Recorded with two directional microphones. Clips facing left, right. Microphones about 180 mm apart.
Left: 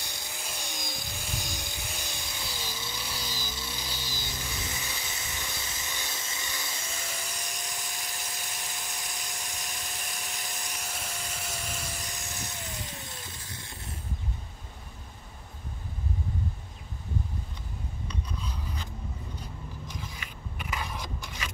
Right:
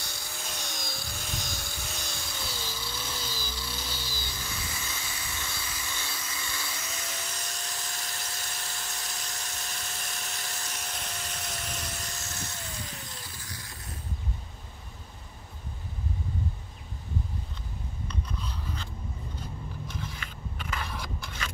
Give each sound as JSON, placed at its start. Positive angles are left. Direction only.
{"t": 0.0, "sound": "a sound", "side_deg": 15}
{"t": 13.4, "sound": "vehicle", "side_deg": 25}
{"t": 20.2, "sound": "scrape", "side_deg": 15}